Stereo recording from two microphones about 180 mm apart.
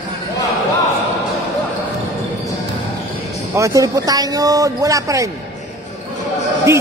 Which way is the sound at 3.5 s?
15° right (ahead or behind).